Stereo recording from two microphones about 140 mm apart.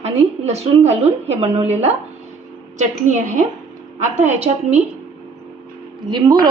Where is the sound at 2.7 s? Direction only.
60° right (ahead or behind).